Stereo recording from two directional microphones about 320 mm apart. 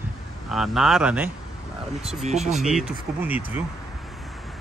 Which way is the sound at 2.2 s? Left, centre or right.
Right.